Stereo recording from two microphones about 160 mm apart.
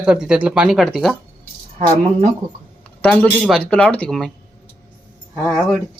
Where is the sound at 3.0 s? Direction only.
5° left (ahead or behind).